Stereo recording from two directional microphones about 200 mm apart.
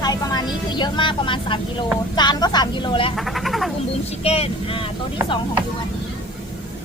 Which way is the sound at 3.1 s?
Centre (ahead or behind).